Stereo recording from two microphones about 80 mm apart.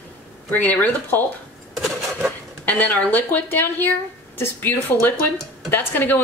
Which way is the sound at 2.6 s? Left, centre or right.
Left.